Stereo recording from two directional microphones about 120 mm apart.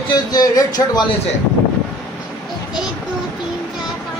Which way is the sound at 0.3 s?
30° left (ahead or behind).